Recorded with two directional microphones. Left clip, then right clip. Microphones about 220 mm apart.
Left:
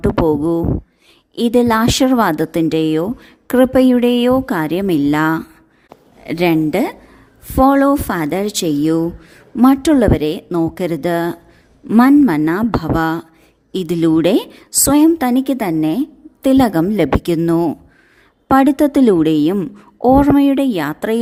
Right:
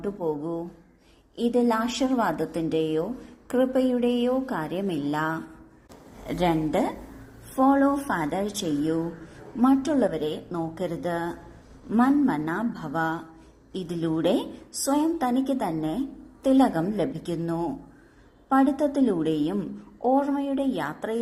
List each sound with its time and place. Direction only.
0.3 s a woman's voice: 45° left (ahead or behind)